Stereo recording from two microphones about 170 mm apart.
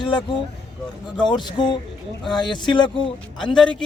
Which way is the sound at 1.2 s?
25° left (ahead or behind).